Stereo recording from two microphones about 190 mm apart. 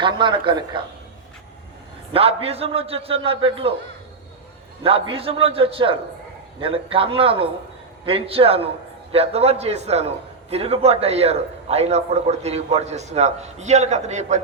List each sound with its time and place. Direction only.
0.0 s a man's voice: 25° right (ahead or behind)
2.1 s a man's voice: 30° right (ahead or behind)
4.8 s a man's voice: 30° right (ahead or behind)